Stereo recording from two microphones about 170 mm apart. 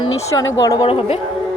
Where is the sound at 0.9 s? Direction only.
35° left (ahead or behind).